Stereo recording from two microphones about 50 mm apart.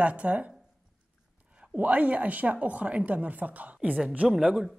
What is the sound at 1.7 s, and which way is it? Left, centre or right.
A man's voice, right.